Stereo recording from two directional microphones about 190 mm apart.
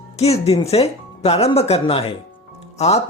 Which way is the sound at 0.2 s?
35° left (ahead or behind).